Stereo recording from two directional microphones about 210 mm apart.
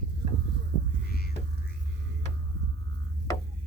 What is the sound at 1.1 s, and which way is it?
Music, 45° left (ahead or behind).